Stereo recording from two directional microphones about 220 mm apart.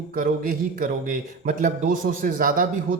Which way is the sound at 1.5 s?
40° right (ahead or behind).